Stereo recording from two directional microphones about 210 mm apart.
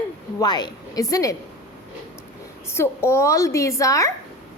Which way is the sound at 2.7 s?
10° left (ahead or behind).